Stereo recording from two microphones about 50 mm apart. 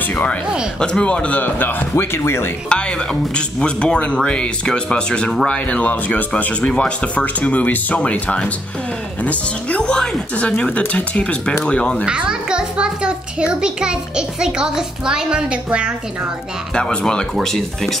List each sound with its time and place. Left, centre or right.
0.0 s a sound: left
0.7 s speech: centre; by 2.0 s left
2.1 s speech: left
2.7 s speech: centre
11.1 s speech: left
12.1 s a child's voice: centre
16.7 s speech: centre
17.4 s speech: centre